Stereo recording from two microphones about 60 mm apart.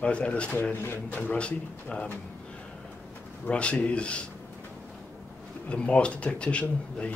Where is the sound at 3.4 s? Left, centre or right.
Centre.